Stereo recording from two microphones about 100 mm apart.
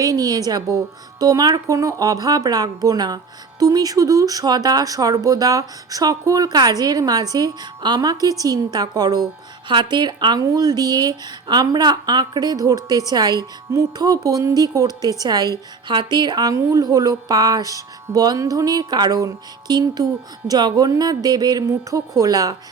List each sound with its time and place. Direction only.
0.0 s speech: 35° right (ahead or behind)